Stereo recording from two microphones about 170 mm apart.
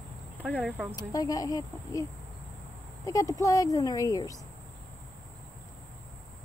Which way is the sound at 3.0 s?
20° left (ahead or behind).